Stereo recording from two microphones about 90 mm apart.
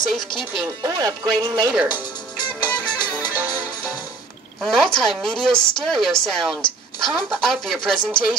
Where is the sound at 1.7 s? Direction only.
15° right (ahead or behind).